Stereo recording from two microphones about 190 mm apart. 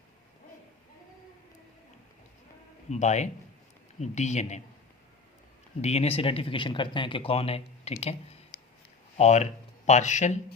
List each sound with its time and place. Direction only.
2.9 s speech: 35° left (ahead or behind)
5.8 s speech: 35° left (ahead or behind)